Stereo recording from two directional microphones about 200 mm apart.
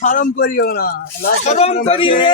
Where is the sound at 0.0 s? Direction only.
40° left (ahead or behind).